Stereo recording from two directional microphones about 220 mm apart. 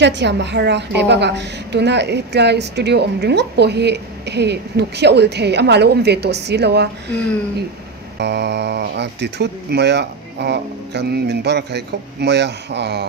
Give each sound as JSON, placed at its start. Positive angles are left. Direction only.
{"t": 0.0, "sound": "a woman's voice", "side_deg": -50}
{"t": 8.2, "sound": "a woman's voice", "side_deg": -50}